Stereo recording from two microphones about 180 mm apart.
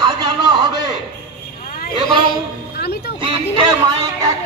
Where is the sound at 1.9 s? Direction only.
Centre (ahead or behind).